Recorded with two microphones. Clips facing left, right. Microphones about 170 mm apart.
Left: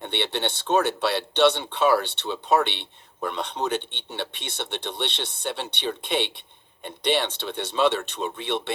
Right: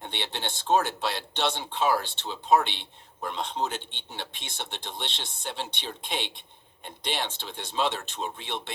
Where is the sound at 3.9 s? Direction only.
65° left (ahead or behind).